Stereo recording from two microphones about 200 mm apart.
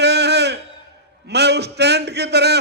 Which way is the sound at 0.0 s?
55° right (ahead or behind).